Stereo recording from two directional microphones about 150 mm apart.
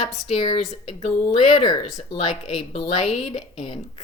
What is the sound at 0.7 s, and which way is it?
Speech, 45° left (ahead or behind).